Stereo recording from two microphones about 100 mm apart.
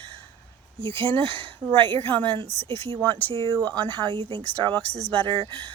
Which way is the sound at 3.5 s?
15° left (ahead or behind).